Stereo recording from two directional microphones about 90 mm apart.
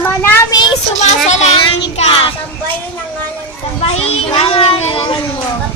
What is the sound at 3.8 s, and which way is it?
A child's voice, 90° left.